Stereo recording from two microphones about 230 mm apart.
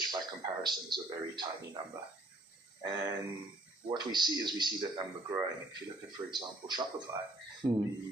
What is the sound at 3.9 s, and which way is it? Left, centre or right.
Speech, centre.